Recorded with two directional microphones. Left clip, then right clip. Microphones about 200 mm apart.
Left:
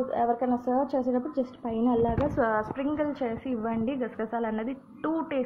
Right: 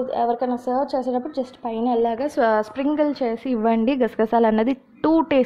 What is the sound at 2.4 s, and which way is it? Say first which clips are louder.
A woman's voice: right 11 dB; 60° right (ahead or behind).